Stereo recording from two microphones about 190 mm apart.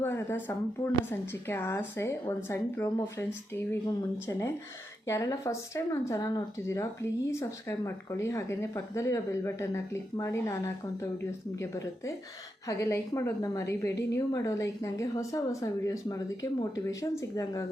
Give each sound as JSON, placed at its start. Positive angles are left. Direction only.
{"t": 0.0, "sound": "speech", "side_deg": 10}